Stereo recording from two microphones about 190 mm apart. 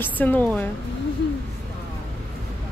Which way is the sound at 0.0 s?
10° left (ahead or behind).